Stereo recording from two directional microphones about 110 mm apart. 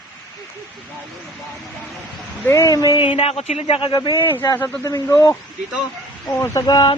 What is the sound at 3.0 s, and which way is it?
Speech, 55° left (ahead or behind).